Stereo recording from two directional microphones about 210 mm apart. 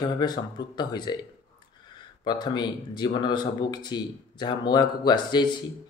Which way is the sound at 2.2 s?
20° left (ahead or behind).